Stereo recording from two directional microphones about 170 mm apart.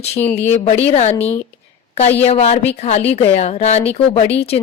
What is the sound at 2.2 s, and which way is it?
Speech, 40° left (ahead or behind).